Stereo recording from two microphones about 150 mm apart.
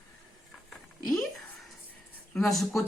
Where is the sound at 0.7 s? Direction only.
5° left (ahead or behind).